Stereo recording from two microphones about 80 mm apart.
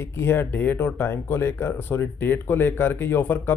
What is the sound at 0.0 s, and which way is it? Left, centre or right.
Speech, left.